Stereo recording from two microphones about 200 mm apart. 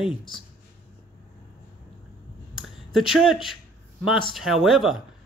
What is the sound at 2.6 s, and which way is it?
Speech, centre (ahead or behind).